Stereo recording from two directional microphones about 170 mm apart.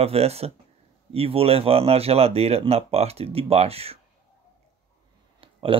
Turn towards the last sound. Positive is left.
turn(degrees=-30)  # may be behind; listen again after turning